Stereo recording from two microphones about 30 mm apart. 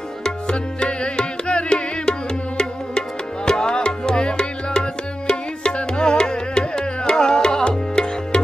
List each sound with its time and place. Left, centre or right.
0.7 s music: left